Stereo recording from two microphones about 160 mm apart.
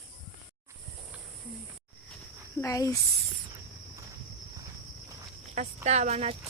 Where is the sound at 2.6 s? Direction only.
20° left (ahead or behind).